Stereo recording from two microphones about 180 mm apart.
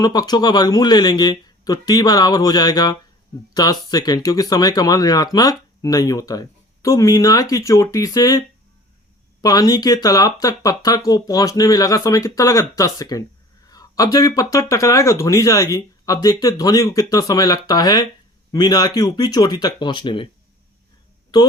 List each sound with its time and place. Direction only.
0.0 s speech: 20° left (ahead or behind)